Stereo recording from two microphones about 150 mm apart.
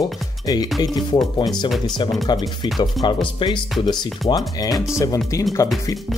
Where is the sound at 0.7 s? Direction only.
25° left (ahead or behind).